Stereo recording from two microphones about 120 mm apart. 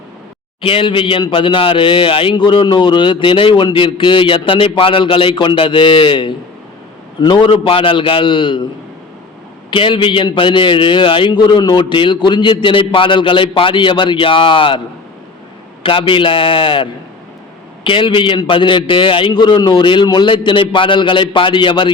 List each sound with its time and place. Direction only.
0.6 s a man's voice: 45° left (ahead or behind)
9.6 s a man's voice: 45° left (ahead or behind)
15.8 s a man's voice: 50° left (ahead or behind)